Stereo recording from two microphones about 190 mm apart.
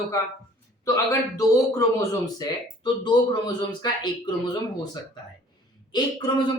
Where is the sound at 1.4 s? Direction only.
15° left (ahead or behind).